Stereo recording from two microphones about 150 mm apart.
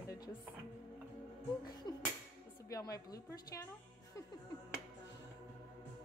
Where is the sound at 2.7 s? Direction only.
25° left (ahead or behind).